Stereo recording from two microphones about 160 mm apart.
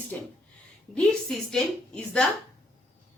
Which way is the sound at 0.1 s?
10° left (ahead or behind).